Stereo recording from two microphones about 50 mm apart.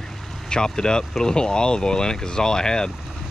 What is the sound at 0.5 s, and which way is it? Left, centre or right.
Speech, centre.